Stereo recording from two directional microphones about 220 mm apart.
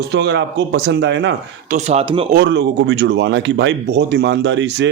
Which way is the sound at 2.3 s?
50° right (ahead or behind).